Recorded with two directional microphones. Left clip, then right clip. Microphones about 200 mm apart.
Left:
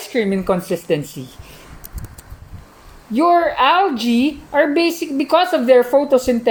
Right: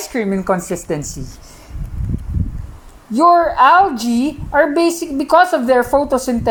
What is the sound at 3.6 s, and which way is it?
A woman's voice, 25° right (ahead or behind).